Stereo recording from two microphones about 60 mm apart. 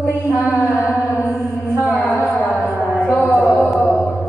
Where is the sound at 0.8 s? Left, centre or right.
Left.